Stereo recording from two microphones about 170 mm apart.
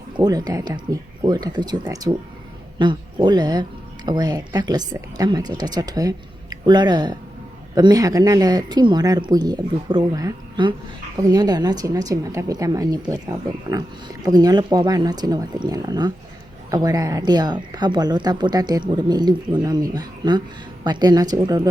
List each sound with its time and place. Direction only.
0.2 s speech: 20° right (ahead or behind)